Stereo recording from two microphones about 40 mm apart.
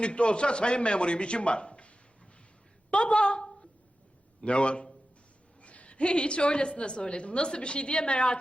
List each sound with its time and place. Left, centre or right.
0.0 s a woman's voice: left
2.9 s a sound: left
4.4 s a woman's voice: left